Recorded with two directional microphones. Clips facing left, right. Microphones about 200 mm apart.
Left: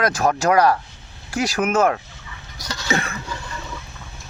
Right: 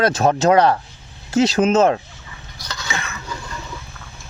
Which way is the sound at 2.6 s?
40° left (ahead or behind).